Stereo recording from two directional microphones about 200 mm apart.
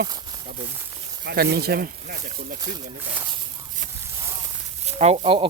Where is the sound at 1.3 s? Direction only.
50° right (ahead or behind).